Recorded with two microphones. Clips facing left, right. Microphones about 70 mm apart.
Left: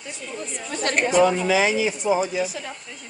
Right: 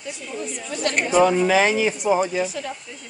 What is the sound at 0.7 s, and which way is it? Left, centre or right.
Speech, left.